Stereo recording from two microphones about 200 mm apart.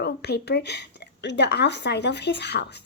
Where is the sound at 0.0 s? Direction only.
55° left (ahead or behind).